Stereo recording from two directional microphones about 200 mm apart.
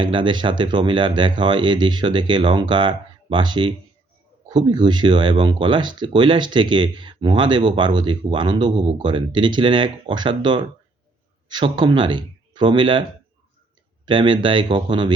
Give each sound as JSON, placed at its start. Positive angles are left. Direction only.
{"t": 0.0, "sound": "speech", "side_deg": -25}